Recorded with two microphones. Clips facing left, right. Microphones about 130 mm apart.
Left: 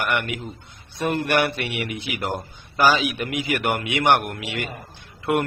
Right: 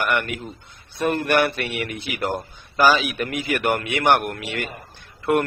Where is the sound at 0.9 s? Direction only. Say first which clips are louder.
Right 2 dB; 15° left (ahead or behind).